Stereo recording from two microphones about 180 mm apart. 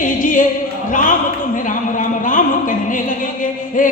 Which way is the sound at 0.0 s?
45° left (ahead or behind).